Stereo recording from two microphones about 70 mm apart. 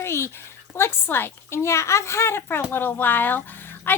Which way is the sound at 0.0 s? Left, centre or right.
Left.